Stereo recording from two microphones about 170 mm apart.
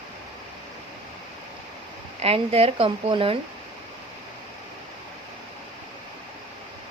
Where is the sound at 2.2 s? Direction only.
35° right (ahead or behind).